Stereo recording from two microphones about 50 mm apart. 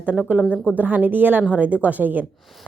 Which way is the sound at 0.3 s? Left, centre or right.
Right.